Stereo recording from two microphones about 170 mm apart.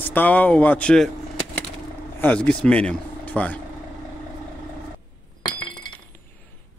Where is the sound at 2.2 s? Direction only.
5° left (ahead or behind).